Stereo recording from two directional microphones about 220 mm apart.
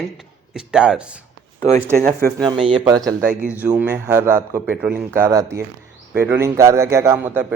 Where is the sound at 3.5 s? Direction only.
10° right (ahead or behind).